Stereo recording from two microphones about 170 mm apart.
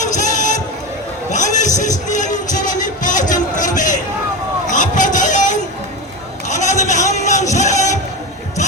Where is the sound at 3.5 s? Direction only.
50° left (ahead or behind).